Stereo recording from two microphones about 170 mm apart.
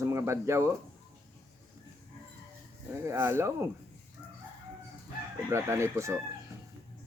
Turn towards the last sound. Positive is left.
turn(degrees=-15)  # may be behind; listen again after turning